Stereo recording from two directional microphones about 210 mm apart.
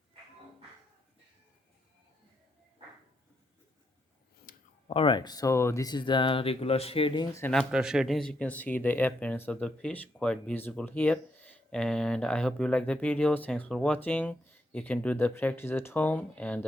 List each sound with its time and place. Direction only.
4.4 s speech: 30° left (ahead or behind)
7.3 s speech: 10° left (ahead or behind)
7.7 s speech: 5° right (ahead or behind)